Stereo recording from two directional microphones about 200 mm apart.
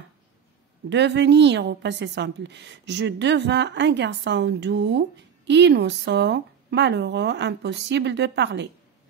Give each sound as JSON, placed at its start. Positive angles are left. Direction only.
{"t": 0.8, "sound": "a woman's voice", "side_deg": -60}